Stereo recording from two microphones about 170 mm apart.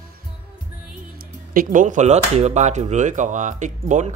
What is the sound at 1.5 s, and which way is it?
Speech, 50° right (ahead or behind).